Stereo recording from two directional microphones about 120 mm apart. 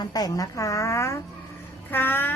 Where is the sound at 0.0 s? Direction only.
30° left (ahead or behind).